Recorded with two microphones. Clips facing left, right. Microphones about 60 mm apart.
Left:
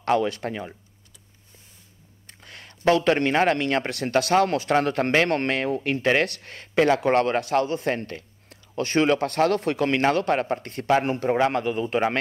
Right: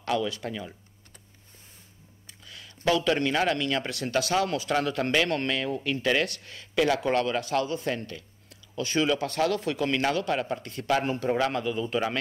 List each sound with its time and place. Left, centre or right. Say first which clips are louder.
0.0 s speech: left 6 dB; left
2.4 s speech: left 5 dB; left